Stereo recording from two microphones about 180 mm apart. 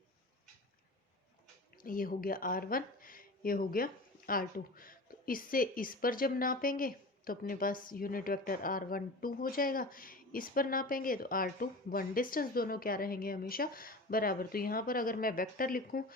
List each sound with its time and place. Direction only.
1.8 s speech: 50° left (ahead or behind)